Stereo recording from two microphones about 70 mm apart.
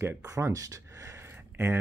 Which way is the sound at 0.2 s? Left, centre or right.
Right.